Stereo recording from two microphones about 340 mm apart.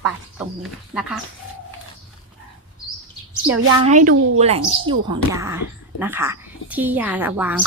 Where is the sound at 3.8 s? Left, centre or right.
Right.